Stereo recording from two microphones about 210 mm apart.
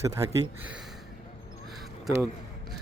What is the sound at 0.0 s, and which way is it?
Speech, 15° right (ahead or behind).